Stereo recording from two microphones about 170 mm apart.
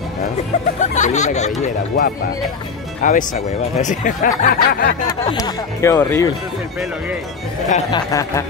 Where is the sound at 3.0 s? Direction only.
50° left (ahead or behind).